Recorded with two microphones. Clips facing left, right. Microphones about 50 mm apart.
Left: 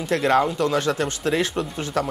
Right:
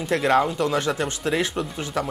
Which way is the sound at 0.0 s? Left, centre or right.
Right.